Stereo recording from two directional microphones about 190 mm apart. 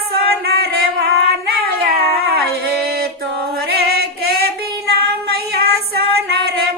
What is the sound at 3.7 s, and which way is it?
Female singing, 55° right (ahead or behind).